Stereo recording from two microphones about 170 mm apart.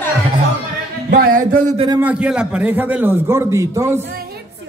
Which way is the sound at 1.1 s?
55° right (ahead or behind).